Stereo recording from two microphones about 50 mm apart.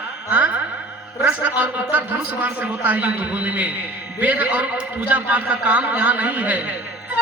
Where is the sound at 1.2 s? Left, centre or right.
Right.